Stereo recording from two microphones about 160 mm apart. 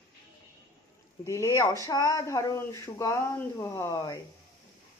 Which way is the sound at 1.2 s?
20° left (ahead or behind).